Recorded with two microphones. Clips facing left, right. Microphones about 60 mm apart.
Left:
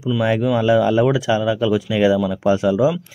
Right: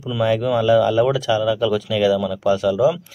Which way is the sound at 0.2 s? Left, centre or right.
Centre.